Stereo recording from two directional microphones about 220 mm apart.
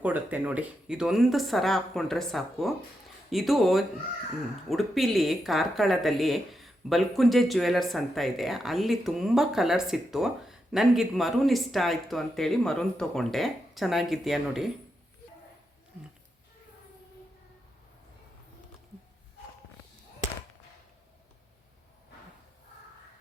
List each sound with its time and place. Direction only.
0.0 s speech: 5° right (ahead or behind)